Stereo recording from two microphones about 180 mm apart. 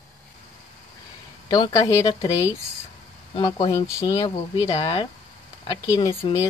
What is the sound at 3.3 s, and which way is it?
Speech, 25° left (ahead or behind).